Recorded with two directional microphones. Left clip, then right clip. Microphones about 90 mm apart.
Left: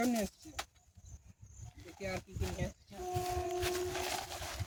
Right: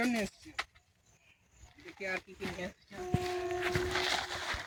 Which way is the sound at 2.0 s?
40° left (ahead or behind).